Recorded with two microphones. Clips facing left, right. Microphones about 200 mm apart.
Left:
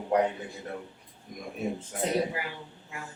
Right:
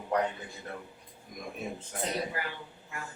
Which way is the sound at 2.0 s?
10° left (ahead or behind).